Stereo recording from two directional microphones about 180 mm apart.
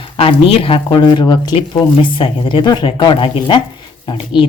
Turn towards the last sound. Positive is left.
turn(degrees=25)  # may be behind; listen again after turning